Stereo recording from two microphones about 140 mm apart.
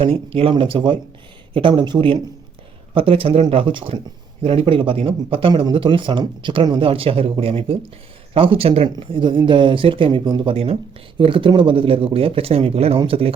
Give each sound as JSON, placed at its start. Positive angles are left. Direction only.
{"t": 0.0, "sound": "speech", "side_deg": -40}